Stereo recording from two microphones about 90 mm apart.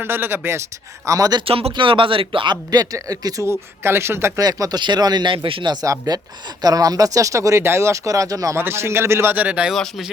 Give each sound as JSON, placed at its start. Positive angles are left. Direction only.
{"t": 0.0, "sound": "a man's voice", "side_deg": -25}
{"t": 1.0, "sound": "speech", "side_deg": -40}
{"t": 1.4, "sound": "speech", "side_deg": -75}
{"t": 2.6, "sound": "speech", "side_deg": -45}
{"t": 4.4, "sound": "speech", "side_deg": -40}
{"t": 5.7, "sound": "speech", "side_deg": -45}
{"t": 8.5, "sound": "a man's voice", "side_deg": -30}
{"t": 9.7, "sound": "speech", "side_deg": 5}